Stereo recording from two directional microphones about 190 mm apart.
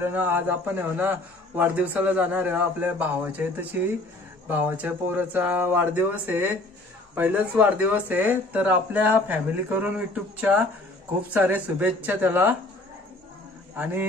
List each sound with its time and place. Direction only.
0.0 s a man's voice: 10° right (ahead or behind)